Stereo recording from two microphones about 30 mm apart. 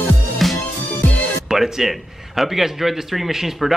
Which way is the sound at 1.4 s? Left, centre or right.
Centre.